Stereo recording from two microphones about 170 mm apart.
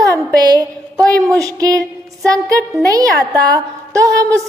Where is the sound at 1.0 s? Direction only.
5° left (ahead or behind).